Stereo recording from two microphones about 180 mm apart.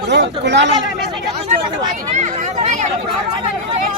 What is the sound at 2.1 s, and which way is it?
Speech, 40° right (ahead or behind).